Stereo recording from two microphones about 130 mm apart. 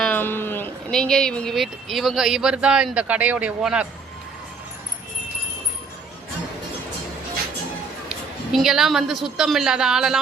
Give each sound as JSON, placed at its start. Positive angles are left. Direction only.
{"t": 0.0, "sound": "a sound", "side_deg": 15}
{"t": 0.9, "sound": "speech", "side_deg": 5}
{"t": 8.5, "sound": "speech", "side_deg": -5}